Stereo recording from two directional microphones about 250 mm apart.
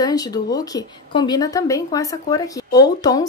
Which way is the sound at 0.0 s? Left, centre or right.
Centre.